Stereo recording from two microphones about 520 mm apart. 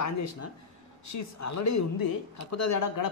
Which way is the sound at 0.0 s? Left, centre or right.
Left.